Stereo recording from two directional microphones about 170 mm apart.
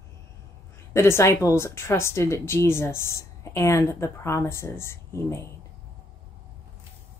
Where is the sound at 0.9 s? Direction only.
15° left (ahead or behind).